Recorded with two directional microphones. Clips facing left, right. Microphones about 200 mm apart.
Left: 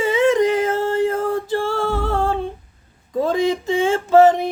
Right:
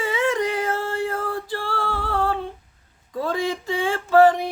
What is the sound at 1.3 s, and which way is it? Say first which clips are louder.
A capella: left 7 dB; 25° left (ahead or behind).